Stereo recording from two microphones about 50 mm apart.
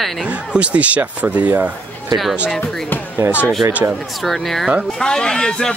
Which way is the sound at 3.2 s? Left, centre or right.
Right.